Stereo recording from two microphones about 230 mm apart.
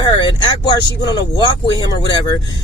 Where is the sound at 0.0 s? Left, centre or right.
Centre.